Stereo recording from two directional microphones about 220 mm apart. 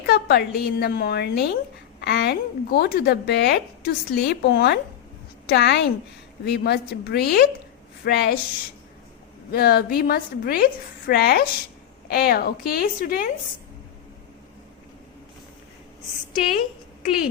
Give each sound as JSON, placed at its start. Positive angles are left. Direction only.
{"t": 0.0, "sound": "a woman's voice", "side_deg": 45}
{"t": 9.5, "sound": "a woman's voice", "side_deg": 45}